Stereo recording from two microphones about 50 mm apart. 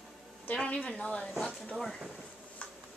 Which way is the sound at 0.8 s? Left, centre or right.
Left.